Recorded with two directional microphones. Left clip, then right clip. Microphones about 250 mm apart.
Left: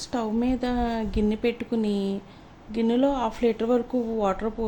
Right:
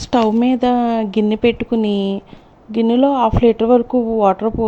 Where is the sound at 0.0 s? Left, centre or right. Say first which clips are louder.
Right 12 dB; right.